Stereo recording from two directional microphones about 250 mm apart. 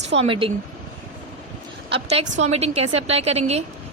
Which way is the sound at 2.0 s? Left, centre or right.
Right.